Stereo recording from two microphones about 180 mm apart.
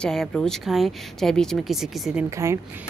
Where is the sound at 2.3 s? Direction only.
15° right (ahead or behind).